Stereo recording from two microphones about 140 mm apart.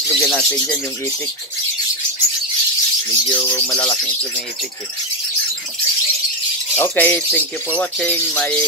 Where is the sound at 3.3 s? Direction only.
15° left (ahead or behind).